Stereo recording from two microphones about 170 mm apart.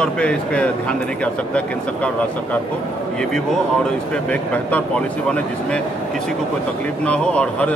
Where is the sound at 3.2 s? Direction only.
5° left (ahead or behind).